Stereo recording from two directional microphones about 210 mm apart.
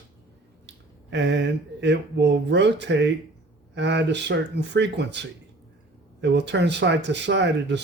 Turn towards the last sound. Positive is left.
turn(degrees=-55)  # may be behind; listen again after turning